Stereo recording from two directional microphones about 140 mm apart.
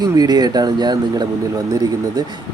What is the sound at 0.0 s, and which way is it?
Speech, 30° right (ahead or behind).